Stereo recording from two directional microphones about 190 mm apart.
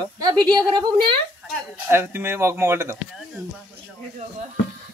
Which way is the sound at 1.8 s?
10° right (ahead or behind).